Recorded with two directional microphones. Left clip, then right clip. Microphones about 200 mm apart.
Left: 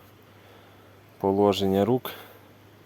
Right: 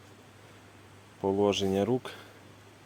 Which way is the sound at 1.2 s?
30° left (ahead or behind).